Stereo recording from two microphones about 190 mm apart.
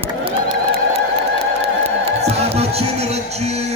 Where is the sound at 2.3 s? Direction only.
35° right (ahead or behind).